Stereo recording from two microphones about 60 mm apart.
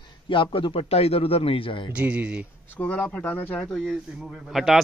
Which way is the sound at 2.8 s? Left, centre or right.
Left.